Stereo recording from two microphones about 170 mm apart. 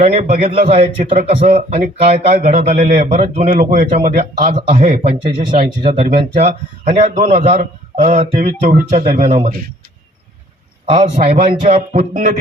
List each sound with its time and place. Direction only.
0.1 s a man's voice: 45° right (ahead or behind)
6.4 s a man's voice: 40° right (ahead or behind)
10.8 s a man's voice: 40° right (ahead or behind)